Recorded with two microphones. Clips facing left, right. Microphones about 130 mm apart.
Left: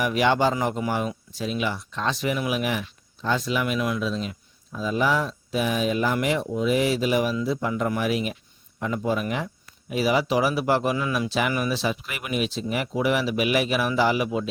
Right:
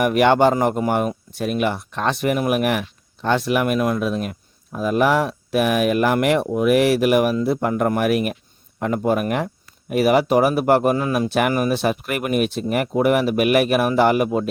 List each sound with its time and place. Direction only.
0.0 s speech: 55° right (ahead or behind)